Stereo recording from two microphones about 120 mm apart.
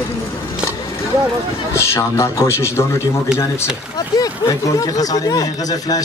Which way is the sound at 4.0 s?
30° left (ahead or behind).